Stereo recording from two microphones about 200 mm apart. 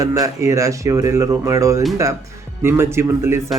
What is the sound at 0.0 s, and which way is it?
Speech, 15° right (ahead or behind).